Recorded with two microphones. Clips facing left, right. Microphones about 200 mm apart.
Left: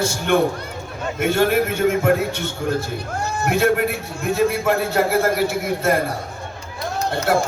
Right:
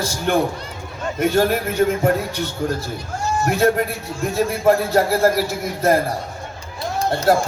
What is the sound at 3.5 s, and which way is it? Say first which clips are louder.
A man's voice: even; 35° right (ahead or behind).